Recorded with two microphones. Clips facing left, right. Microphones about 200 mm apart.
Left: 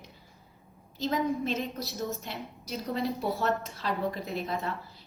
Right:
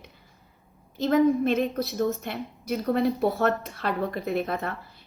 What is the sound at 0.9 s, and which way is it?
A woman's voice, 55° right (ahead or behind).